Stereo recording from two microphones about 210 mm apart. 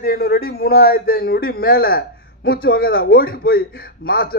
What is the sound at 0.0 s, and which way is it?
A man's voice, 45° left (ahead or behind).